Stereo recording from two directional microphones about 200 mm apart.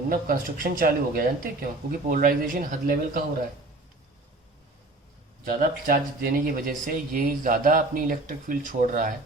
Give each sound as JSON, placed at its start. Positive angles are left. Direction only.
{"t": 0.1, "sound": "speech", "side_deg": -45}
{"t": 5.5, "sound": "speech", "side_deg": -45}